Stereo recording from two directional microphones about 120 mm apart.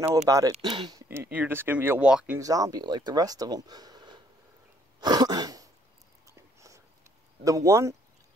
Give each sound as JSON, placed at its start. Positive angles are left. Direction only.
{"t": 0.3, "sound": "speech", "side_deg": -30}
{"t": 1.0, "sound": "speech", "side_deg": -20}
{"t": 2.3, "sound": "speech", "side_deg": -30}
{"t": 5.0, "sound": "throat clearing", "side_deg": -35}
{"t": 6.2, "sound": "a sound", "side_deg": -25}
{"t": 7.4, "sound": "speech", "side_deg": -25}